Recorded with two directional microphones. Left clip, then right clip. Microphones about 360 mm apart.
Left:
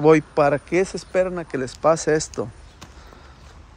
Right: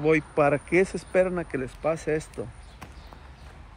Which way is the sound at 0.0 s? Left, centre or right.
Centre.